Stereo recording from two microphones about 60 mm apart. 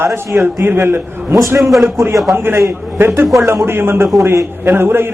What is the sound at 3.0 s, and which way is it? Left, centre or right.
A man's voice, right.